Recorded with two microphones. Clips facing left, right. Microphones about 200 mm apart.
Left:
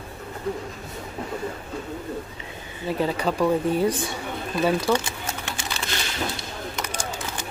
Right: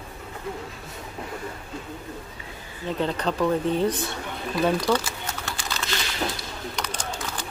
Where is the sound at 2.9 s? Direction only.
10° left (ahead or behind).